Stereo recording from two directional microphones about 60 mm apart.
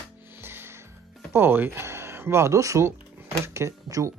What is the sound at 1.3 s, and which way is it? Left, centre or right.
Speech, right.